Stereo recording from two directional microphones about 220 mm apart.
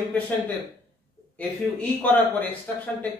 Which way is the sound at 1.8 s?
10° left (ahead or behind).